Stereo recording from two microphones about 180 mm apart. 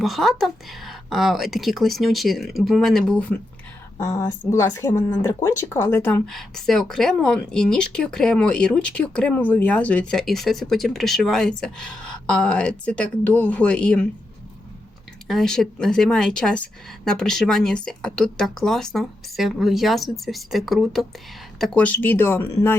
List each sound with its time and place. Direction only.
0.0 s a woman's voice: centre (ahead or behind)
6.2 s a woman's voice: centre (ahead or behind)
15.3 s a woman's voice: centre (ahead or behind)